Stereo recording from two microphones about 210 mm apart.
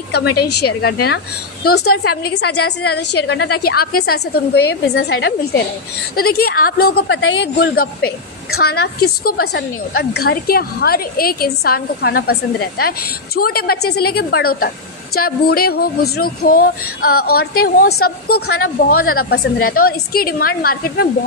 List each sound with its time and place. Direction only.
0.1 s a woman's voice: 50° left (ahead or behind)